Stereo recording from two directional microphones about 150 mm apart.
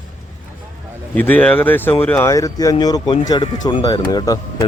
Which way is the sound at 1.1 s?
10° left (ahead or behind).